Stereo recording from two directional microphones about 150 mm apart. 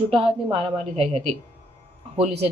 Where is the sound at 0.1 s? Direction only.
40° right (ahead or behind).